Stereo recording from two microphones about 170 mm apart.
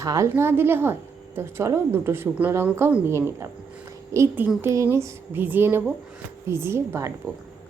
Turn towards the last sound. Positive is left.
turn(degrees=-15)  # may be behind; listen again after turning